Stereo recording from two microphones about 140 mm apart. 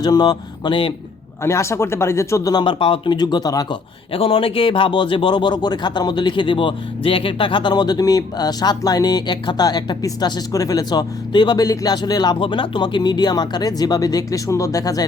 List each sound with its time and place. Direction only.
0.0 s speech: 30° left (ahead or behind)
1.5 s speech: 20° left (ahead or behind)
4.1 s speech: 40° left (ahead or behind); by 15.0 s 25° left (ahead or behind)